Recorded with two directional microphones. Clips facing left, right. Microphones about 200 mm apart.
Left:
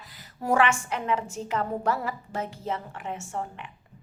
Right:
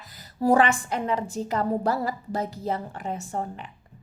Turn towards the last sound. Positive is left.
turn(degrees=-35)  # may be behind; listen again after turning